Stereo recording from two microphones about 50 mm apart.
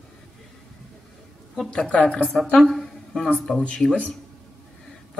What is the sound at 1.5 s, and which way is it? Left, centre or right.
Speech, centre.